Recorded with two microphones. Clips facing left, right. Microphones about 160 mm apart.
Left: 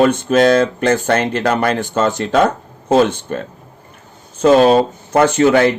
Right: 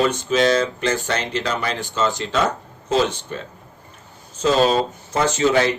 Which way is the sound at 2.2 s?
55° left (ahead or behind).